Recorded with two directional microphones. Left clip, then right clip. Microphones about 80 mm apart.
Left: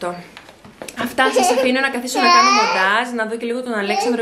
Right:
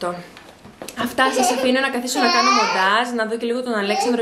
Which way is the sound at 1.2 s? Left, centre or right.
Centre.